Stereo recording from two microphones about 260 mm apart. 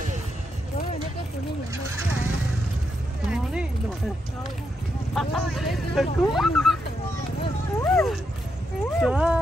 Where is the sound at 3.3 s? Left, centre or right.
Centre.